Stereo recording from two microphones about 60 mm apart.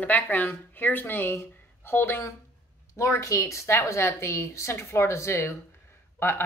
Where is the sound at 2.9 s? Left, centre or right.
Left.